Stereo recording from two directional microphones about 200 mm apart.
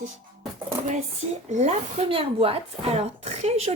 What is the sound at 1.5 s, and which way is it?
Speech, 35° right (ahead or behind).